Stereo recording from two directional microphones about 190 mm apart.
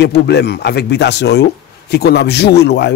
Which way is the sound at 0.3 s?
60° left (ahead or behind).